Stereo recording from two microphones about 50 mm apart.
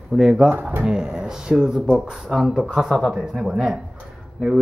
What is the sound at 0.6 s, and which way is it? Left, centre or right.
Speech, right.